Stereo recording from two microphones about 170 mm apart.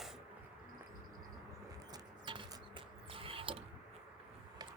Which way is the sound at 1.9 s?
30° right (ahead or behind).